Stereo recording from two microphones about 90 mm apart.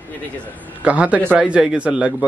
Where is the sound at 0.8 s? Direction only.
15° right (ahead or behind).